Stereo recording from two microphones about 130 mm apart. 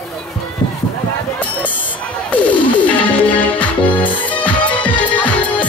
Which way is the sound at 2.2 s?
10° left (ahead or behind).